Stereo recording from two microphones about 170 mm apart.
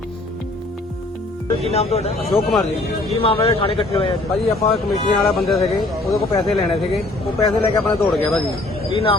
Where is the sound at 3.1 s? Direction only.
35° left (ahead or behind).